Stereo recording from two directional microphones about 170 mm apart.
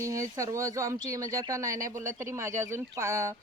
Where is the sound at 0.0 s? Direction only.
20° right (ahead or behind).